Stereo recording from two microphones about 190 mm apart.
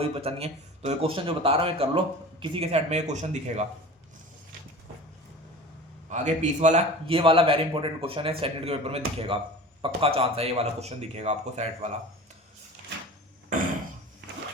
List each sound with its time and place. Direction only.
0.0 s speech: 30° right (ahead or behind)
6.1 s a man's voice: 40° right (ahead or behind)